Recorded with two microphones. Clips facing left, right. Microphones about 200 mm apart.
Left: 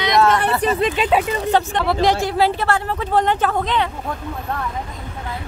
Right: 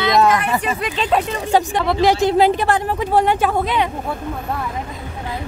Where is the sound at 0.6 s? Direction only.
35° left (ahead or behind).